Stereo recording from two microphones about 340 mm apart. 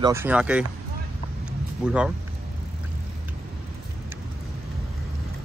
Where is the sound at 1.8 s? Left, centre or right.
Centre.